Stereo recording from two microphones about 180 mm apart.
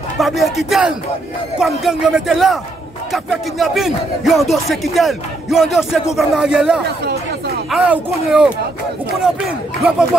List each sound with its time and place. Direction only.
0.2 s speech: centre (ahead or behind)
9.8 s speech: centre (ahead or behind)